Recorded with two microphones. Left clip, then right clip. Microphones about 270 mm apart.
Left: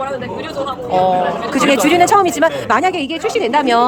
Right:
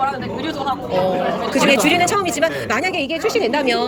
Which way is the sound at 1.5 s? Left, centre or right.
Centre.